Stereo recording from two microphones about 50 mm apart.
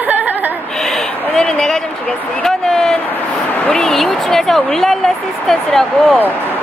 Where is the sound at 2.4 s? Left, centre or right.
Centre.